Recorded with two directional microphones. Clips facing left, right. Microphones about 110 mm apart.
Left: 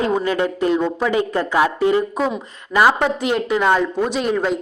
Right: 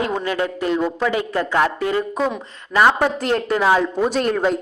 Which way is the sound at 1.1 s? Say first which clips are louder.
Left 2 dB; 25° left (ahead or behind).